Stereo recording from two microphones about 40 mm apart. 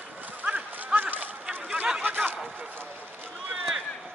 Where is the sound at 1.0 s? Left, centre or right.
Right.